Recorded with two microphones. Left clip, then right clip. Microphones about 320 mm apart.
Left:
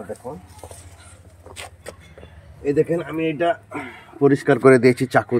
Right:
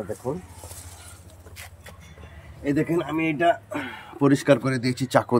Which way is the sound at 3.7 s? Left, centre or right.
Centre.